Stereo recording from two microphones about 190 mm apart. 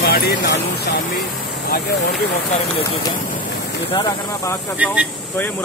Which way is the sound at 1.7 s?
60° left (ahead or behind).